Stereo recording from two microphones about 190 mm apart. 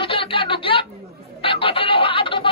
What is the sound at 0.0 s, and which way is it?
Music, 30° left (ahead or behind).